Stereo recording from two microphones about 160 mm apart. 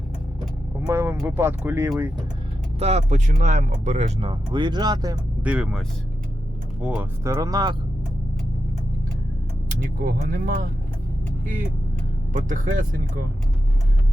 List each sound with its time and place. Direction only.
0.9 s speech: 15° right (ahead or behind)
2.7 s speech: 40° right (ahead or behind)
4.3 s speech: 25° right (ahead or behind)
5.4 s speech: 5° right (ahead or behind)
6.8 s speech: 5° right (ahead or behind)
7.3 s speech: 20° right (ahead or behind)
10.0 s speech: 65° right (ahead or behind)